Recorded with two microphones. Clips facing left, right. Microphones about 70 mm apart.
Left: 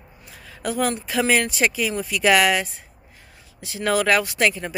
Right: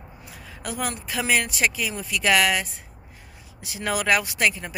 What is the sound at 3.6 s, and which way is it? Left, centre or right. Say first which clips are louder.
Speech: left 5 dB; centre.